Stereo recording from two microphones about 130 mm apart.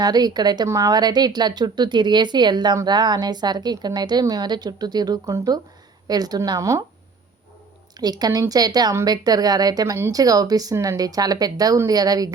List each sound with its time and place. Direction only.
0.0 s a woman's voice: 30° right (ahead or behind)
7.9 s speech: 30° right (ahead or behind)